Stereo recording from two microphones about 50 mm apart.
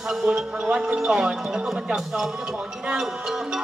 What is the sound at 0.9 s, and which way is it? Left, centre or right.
Music, centre.